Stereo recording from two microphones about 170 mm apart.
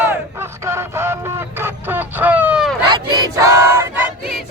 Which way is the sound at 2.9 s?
25° right (ahead or behind).